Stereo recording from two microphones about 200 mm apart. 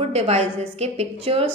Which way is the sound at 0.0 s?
30° right (ahead or behind).